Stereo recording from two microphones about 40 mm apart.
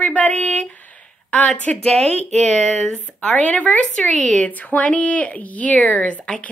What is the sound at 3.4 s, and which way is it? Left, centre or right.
Speech, left.